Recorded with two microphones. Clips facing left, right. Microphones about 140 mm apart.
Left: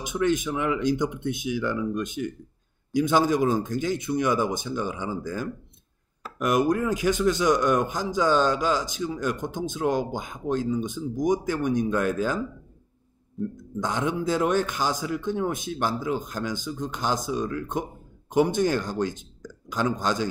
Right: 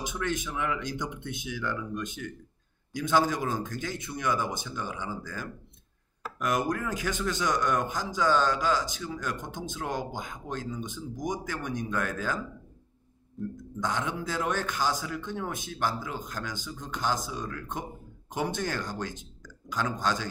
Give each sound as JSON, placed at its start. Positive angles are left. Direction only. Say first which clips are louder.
{"t": 0.0, "sound": "speech", "louder": "left 8 dB", "side_deg": 15}
{"t": 13.4, "sound": "speech", "louder": "left 5 dB", "side_deg": 0}
{"t": 13.7, "sound": "speech", "louder": "left 5 dB", "side_deg": 15}